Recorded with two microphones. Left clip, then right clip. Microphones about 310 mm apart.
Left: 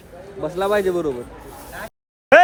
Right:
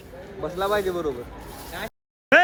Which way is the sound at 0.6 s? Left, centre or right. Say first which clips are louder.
Left 5 dB; left.